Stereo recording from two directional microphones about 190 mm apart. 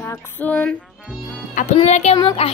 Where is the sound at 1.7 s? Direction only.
35° left (ahead or behind).